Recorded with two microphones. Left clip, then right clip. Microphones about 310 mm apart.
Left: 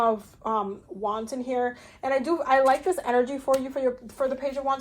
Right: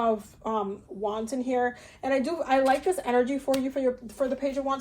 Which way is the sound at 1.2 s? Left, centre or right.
Left.